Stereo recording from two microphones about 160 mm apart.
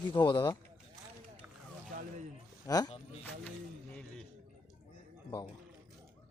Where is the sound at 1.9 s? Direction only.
50° right (ahead or behind).